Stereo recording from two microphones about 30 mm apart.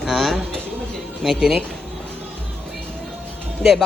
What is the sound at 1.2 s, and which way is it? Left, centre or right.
Speech, centre.